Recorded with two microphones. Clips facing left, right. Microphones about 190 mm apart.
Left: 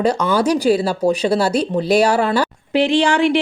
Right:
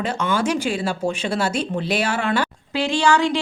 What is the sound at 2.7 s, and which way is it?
Speech, 15° left (ahead or behind).